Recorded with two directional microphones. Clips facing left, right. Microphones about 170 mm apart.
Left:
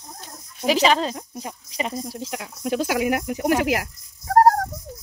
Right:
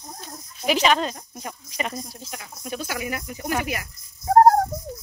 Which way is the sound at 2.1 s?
85° left.